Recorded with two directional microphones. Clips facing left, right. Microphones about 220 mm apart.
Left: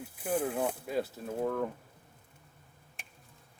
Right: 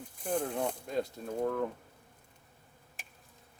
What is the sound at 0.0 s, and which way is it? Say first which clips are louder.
Speech: left 2 dB; 5° left (ahead or behind).